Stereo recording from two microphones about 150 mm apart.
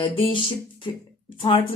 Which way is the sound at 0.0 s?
35° left (ahead or behind).